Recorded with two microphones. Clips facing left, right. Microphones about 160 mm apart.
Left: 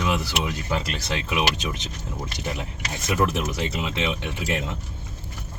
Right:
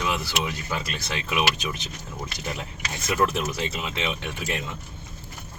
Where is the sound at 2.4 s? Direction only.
20° left (ahead or behind).